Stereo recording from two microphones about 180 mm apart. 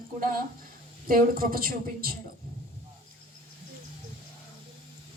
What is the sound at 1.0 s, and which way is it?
A man's voice, 55° right (ahead or behind).